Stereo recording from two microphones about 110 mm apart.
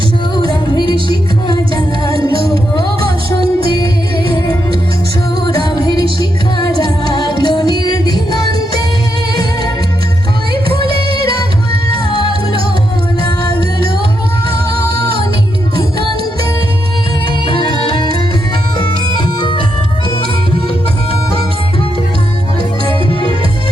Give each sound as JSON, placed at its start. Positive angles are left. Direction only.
{"t": 0.3, "sound": "music", "side_deg": 40}
{"t": 5.8, "sound": "music", "side_deg": 35}
{"t": 17.4, "sound": "music", "side_deg": 45}
{"t": 19.4, "sound": "music", "side_deg": 45}